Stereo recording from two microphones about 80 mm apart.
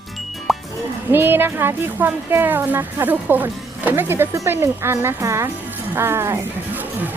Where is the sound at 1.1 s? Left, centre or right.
Right.